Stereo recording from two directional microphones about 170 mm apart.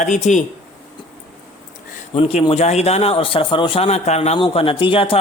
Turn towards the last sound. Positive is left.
turn(degrees=30)  # may be behind; listen again after turning